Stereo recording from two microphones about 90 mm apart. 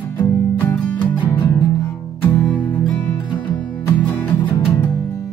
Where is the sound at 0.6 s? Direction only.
20° left (ahead or behind).